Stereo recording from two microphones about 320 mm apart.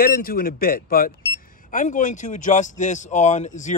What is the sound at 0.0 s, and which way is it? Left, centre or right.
Speech, left.